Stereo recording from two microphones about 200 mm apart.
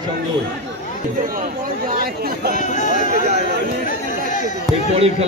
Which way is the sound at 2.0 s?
50° right (ahead or behind).